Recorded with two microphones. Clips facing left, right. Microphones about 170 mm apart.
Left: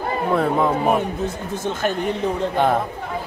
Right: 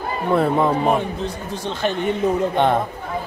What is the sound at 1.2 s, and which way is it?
Speech, 50° left (ahead or behind).